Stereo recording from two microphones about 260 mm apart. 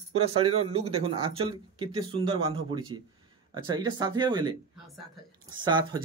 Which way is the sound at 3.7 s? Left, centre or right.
Centre.